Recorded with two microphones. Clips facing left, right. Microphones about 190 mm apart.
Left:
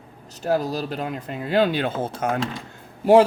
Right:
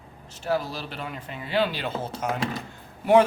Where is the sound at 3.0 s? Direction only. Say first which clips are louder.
Left 4 dB; 35° left (ahead or behind).